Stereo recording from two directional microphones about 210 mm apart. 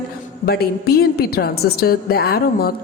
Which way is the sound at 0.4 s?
50° left (ahead or behind).